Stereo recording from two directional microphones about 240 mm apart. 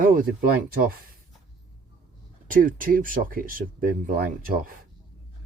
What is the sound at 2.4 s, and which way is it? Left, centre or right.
Speech, right.